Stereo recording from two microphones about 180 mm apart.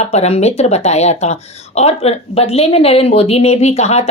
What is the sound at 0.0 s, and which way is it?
Speech, 35° left (ahead or behind).